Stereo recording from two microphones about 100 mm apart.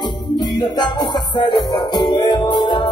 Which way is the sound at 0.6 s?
45° left (ahead or behind).